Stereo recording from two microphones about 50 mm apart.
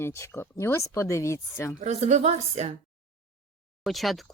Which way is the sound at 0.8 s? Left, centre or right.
Left.